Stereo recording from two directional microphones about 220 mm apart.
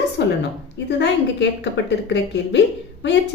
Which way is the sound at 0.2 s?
50° left (ahead or behind).